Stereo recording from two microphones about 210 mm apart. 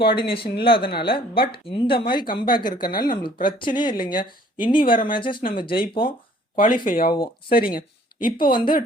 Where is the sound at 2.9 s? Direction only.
45° left (ahead or behind).